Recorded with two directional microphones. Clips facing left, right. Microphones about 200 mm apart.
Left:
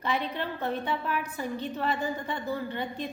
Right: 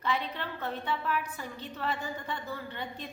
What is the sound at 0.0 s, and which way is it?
A woman's voice, 15° left (ahead or behind).